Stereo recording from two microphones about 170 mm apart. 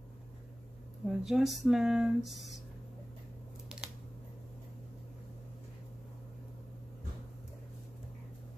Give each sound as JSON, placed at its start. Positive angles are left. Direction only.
{"t": 1.0, "sound": "speech", "side_deg": 0}